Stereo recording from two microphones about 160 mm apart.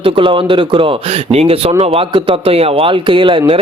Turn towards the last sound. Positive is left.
turn(degrees=-35)  # may be behind; listen again after turning